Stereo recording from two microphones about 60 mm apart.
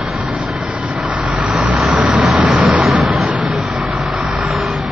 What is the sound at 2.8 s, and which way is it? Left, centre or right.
Vehicle, centre.